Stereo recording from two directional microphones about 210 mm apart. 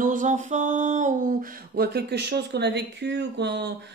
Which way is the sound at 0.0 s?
40° right (ahead or behind).